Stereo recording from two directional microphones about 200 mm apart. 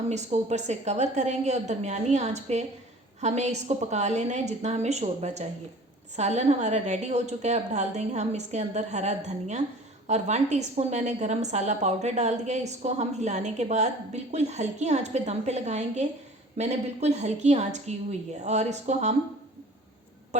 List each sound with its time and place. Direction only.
0.1 s a woman's voice: 35° right (ahead or behind)
20.3 s speech: 35° right (ahead or behind)